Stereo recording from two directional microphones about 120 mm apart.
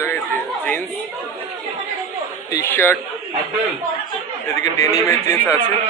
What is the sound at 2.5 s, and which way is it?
Speech, 20° left (ahead or behind).